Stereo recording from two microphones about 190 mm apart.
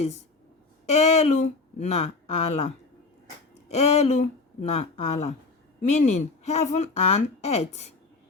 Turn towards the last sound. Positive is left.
turn(degrees=35)  # may be behind; listen again after turning